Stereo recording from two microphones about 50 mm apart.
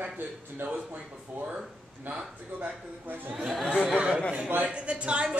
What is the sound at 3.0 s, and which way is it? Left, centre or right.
Speech, right.